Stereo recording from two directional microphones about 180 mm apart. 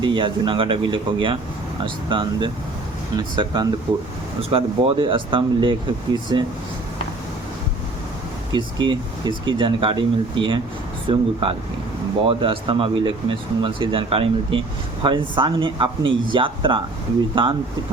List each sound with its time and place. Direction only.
0.0 s speech: 25° right (ahead or behind)
8.5 s speech: 25° right (ahead or behind)